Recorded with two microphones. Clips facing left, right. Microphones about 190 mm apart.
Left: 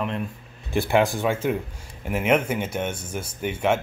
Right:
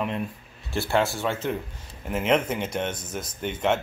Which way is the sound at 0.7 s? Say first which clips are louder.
Left 4 dB; 15° left (ahead or behind).